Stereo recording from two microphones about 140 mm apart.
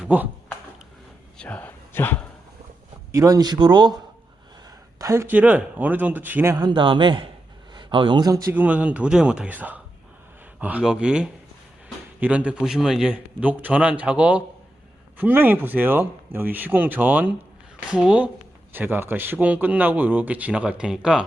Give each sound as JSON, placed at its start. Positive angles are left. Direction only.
{"t": 0.0, "sound": "speech", "side_deg": -10}
{"t": 1.4, "sound": "a sound", "side_deg": 10}
{"t": 3.1, "sound": "speech", "side_deg": -25}
{"t": 4.9, "sound": "a man's voice", "side_deg": -20}
{"t": 6.6, "sound": "a man's voice", "side_deg": -35}